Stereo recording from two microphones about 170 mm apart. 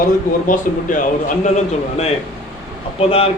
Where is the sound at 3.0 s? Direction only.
35° left (ahead or behind).